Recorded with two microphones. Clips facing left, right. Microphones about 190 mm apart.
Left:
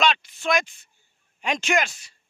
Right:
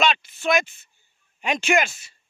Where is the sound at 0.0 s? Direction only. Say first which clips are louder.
Right 1 dB; 5° right (ahead or behind).